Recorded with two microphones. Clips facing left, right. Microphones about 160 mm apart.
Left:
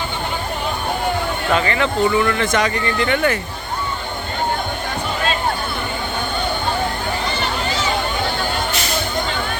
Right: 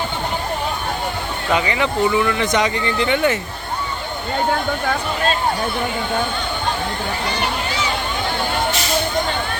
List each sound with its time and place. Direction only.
1.5 s speech: 15° right (ahead or behind)